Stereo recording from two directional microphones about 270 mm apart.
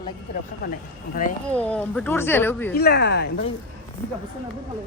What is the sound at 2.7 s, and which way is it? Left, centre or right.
Speech, left.